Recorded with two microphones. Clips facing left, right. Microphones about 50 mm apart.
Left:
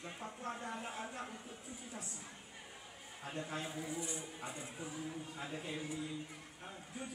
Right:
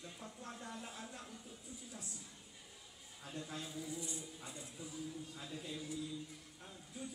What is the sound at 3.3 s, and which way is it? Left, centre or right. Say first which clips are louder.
Speech: left 4 dB; left.